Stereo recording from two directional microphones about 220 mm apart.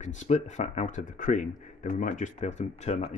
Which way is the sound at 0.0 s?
35° left (ahead or behind).